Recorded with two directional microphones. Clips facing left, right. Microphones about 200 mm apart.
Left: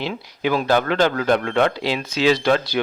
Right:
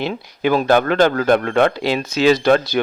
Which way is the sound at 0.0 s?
50° right (ahead or behind).